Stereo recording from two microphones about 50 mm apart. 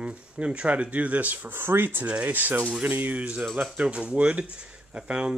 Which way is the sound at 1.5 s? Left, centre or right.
Right.